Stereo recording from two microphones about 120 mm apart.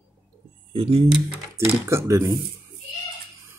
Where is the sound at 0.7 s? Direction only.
55° right (ahead or behind).